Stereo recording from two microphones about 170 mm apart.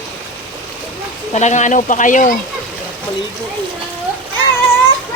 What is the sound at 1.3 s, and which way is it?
Speech, 45° left (ahead or behind).